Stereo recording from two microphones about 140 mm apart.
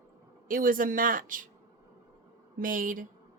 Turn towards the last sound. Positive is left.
turn(degrees=-75)  # may be behind; listen again after turning